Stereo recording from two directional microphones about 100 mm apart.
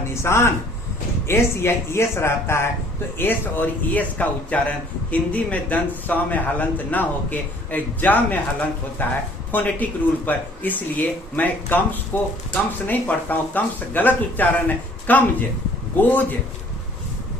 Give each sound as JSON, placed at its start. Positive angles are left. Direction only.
{"t": 0.1, "sound": "a man's voice", "side_deg": 25}